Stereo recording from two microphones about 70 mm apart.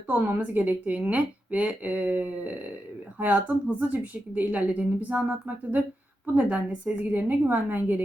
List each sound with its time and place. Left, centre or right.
0.1 s a woman's voice: right
6.3 s a woman's voice: centre